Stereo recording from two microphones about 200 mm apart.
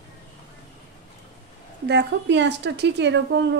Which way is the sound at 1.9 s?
60° right (ahead or behind).